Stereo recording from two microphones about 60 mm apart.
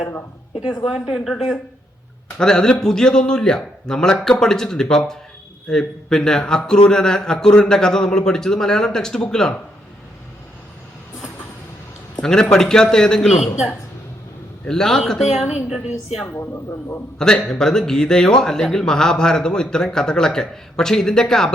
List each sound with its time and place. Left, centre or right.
0.9 s speech: centre
2.4 s speech: centre
12.2 s speech: centre
13.3 s speech: centre
14.7 s speech: centre
16.2 s a man's voice: left
17.2 s speech: centre